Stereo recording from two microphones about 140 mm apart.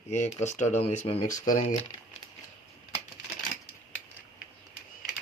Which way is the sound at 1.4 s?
70° left (ahead or behind).